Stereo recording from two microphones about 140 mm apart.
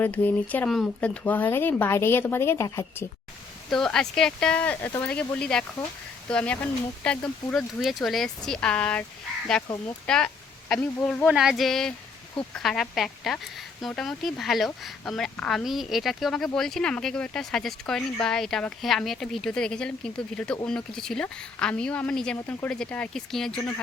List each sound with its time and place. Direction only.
0.0 s a woman's voice: 10° left (ahead or behind)
3.7 s a woman's voice: 5° left (ahead or behind)